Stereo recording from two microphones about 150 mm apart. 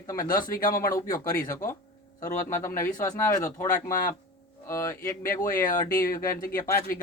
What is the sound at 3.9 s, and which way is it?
Speech, 70° left (ahead or behind).